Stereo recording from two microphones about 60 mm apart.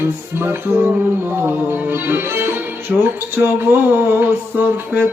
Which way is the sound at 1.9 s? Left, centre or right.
Right.